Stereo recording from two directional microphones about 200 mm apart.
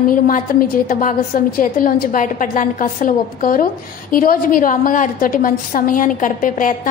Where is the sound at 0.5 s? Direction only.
45° left (ahead or behind).